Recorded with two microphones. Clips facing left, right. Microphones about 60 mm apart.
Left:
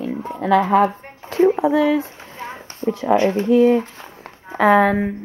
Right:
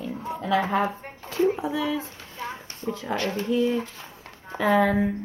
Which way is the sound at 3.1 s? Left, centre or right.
Left.